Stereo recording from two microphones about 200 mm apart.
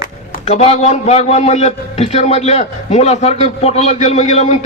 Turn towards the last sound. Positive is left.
turn(degrees=35)  # may be behind; listen again after turning